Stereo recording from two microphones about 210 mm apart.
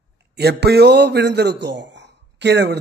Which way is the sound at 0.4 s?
50° right (ahead or behind).